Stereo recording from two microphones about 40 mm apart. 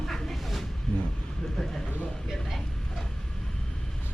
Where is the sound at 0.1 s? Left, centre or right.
Centre.